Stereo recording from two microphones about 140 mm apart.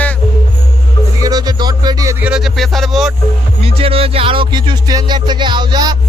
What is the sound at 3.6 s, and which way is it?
Music, 45° right (ahead or behind).